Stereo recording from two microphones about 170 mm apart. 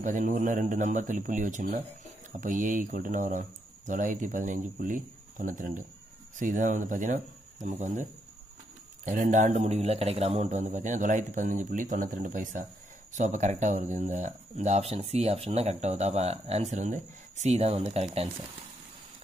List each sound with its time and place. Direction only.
0.0 s a man's voice: 50° right (ahead or behind)